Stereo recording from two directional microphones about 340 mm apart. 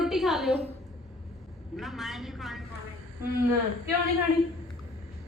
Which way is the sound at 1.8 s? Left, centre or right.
Centre.